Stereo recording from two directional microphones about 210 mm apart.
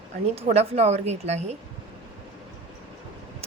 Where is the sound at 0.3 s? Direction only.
30° right (ahead or behind).